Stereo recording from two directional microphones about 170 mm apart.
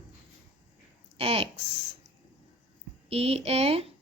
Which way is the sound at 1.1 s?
35° right (ahead or behind).